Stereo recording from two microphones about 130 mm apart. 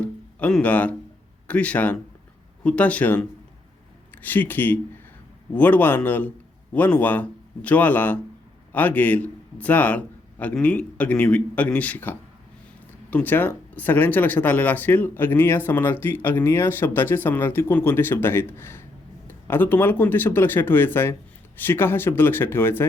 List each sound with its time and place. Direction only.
0.0 s music: 10° left (ahead or behind)
1.5 s speech: 10° left (ahead or behind)